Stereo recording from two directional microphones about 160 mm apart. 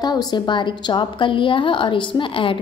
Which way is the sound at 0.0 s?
25° left (ahead or behind).